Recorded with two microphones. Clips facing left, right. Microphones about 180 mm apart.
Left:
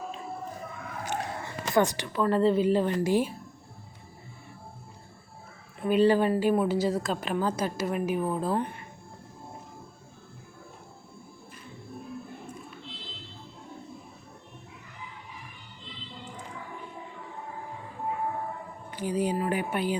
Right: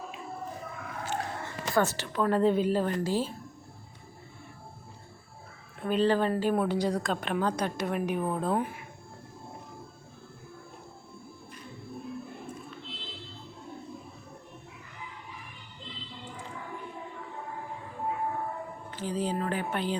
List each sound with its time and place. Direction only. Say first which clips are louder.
1.0 s a sound: left 1 dB; 15° left (ahead or behind)
2.1 s a woman's voice: left 1 dB; centre (ahead or behind)
3.0 s speech: left 4 dB; 15° left (ahead or behind)
5.8 s a woman's voice: left 3 dB; 10° left (ahead or behind)
18.9 s speech: left 4 dB; 15° left (ahead or behind)